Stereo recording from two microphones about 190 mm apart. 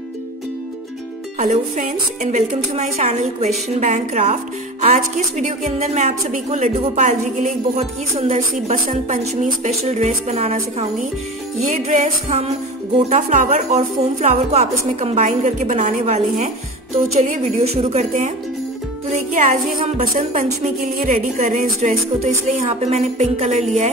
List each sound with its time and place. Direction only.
1.4 s a woman's voice: 40° right (ahead or behind)
20.0 s a woman's voice: 40° right (ahead or behind)